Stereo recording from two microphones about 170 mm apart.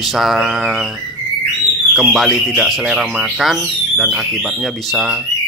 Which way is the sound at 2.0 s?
Centre (ahead or behind).